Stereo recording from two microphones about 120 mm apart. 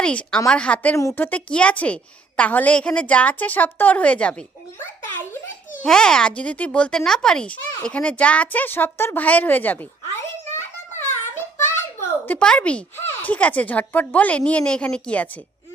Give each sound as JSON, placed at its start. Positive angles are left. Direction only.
{"t": 0.0, "sound": "a woman's voice", "side_deg": 10}
{"t": 5.8, "sound": "a woman's voice", "side_deg": 5}
{"t": 10.9, "sound": "child singing", "side_deg": 20}
{"t": 12.3, "sound": "a woman's voice", "side_deg": 10}